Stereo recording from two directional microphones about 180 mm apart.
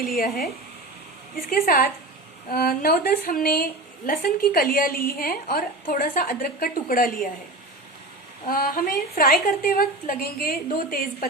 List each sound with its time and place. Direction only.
1.5 s a woman's voice: 55° left (ahead or behind)
8.4 s a woman's voice: 55° left (ahead or behind)